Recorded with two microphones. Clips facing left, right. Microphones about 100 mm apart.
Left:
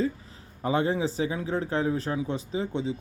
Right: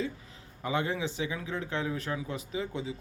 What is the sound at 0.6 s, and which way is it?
Speech, 35° left (ahead or behind).